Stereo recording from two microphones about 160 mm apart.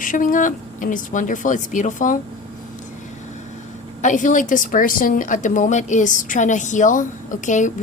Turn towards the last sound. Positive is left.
turn(degrees=50)  # may be behind; listen again after turning